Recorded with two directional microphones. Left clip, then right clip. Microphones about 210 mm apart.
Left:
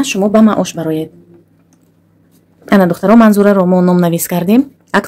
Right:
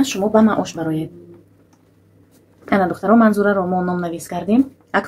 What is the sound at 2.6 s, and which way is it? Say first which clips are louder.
Speech: left 6 dB; 50° left (ahead or behind).